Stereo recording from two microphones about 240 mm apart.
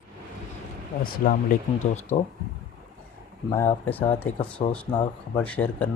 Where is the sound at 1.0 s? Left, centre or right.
Left.